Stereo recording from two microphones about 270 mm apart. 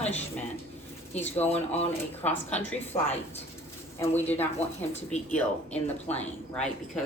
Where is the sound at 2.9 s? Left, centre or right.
Centre.